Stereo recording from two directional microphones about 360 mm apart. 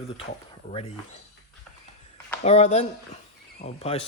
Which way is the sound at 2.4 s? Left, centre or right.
Centre.